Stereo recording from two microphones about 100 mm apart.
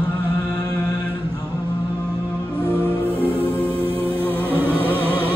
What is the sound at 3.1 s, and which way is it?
Music, 20° right (ahead or behind).